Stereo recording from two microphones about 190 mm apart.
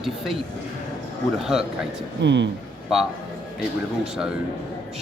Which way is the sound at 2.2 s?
70° right (ahead or behind).